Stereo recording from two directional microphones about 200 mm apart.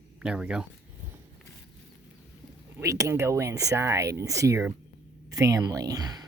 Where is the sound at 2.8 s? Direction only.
15° right (ahead or behind).